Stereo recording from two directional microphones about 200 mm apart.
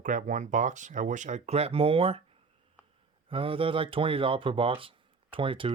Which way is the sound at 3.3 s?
25° right (ahead or behind).